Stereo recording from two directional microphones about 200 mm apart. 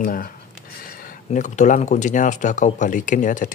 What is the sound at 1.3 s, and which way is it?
Speech, 40° left (ahead or behind).